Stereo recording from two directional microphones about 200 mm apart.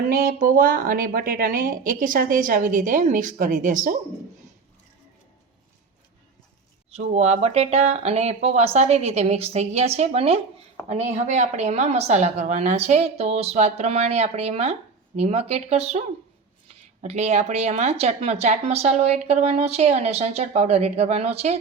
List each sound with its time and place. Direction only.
0.0 s speech: 45° right (ahead or behind)
6.9 s a woman's voice: 35° right (ahead or behind)